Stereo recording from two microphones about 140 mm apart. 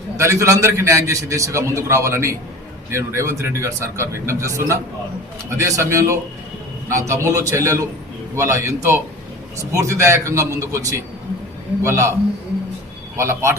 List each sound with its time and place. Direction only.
0.2 s a man's voice: 20° right (ahead or behind)
13.1 s a man's voice: 20° right (ahead or behind)